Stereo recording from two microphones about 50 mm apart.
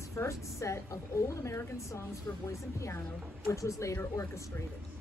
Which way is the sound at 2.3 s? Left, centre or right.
Left.